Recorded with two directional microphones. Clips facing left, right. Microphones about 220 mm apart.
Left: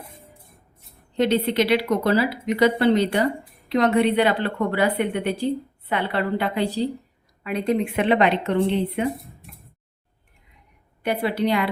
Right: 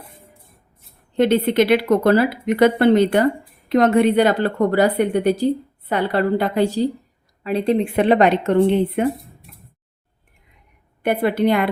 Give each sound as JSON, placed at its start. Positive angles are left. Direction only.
{"t": 1.1, "sound": "a woman's voice", "side_deg": -50}
{"t": 7.4, "sound": "speech", "side_deg": -30}
{"t": 11.0, "sound": "speech", "side_deg": -55}